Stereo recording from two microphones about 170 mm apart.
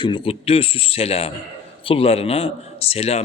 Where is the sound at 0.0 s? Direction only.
30° left (ahead or behind).